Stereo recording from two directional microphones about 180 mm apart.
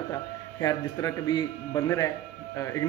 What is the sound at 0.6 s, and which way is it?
A man's voice, 20° left (ahead or behind).